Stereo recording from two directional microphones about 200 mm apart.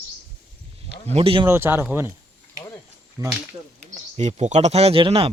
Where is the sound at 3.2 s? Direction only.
20° right (ahead or behind).